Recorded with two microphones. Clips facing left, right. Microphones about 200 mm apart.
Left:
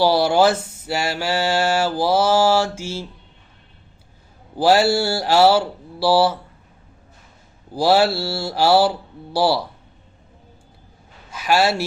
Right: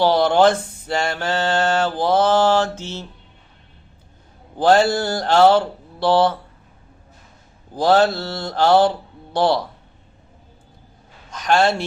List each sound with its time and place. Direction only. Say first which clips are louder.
0.0 s mantra: right 1 dB; 10° left (ahead or behind)
4.5 s mantra: even; 10° left (ahead or behind)
7.7 s mantra: right 1 dB; 10° left (ahead or behind)
11.3 s a man's voice: right 1 dB; 5° left (ahead or behind)